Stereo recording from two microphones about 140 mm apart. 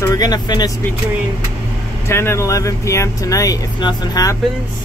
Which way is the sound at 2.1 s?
20° left (ahead or behind).